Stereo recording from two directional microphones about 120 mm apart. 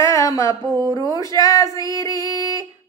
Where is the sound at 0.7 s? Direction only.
40° right (ahead or behind).